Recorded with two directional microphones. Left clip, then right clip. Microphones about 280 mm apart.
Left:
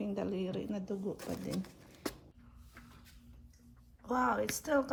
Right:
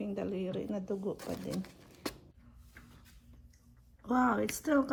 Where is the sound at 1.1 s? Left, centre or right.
Centre.